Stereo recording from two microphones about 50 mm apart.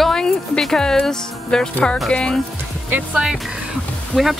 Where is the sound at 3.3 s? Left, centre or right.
Centre.